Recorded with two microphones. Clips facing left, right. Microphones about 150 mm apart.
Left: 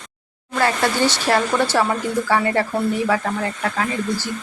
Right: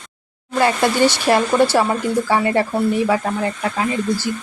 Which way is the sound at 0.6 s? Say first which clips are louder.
Right 3 dB; 15° right (ahead or behind).